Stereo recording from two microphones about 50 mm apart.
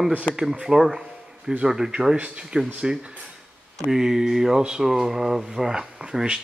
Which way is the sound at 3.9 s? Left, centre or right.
Centre.